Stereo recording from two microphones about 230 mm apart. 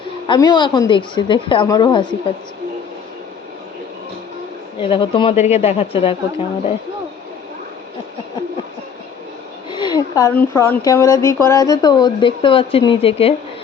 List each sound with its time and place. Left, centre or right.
0.3 s a woman's voice: centre
4.8 s a woman's voice: left
9.6 s speech: centre